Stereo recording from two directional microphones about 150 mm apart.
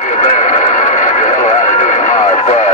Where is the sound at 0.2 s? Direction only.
50° left (ahead or behind).